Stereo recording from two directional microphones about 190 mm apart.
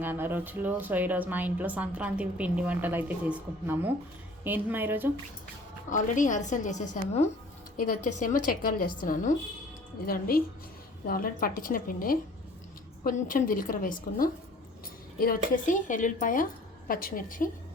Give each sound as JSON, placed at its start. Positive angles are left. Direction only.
{"t": 0.0, "sound": "a woman's voice", "side_deg": -10}
{"t": 5.9, "sound": "a woman's voice", "side_deg": 40}